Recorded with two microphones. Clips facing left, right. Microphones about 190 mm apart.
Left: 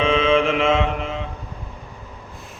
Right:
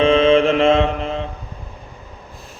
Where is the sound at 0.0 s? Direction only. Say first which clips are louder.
Right 5 dB; 35° right (ahead or behind).